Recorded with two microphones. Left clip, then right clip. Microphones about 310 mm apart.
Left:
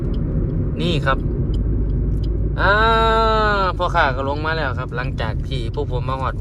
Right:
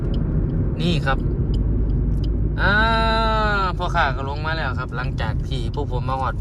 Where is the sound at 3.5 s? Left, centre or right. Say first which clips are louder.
Left 3 dB; centre.